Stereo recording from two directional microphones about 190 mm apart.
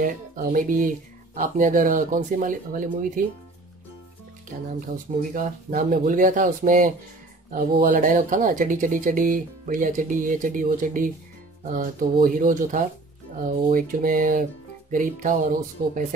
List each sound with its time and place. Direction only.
0.0 s speech: 45° right (ahead or behind)
5.3 s speech: 45° right (ahead or behind)